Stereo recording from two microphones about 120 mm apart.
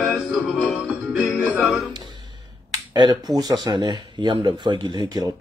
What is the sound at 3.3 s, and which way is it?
Speech, 35° right (ahead or behind).